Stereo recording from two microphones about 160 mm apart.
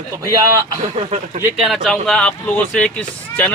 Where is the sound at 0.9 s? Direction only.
45° right (ahead or behind).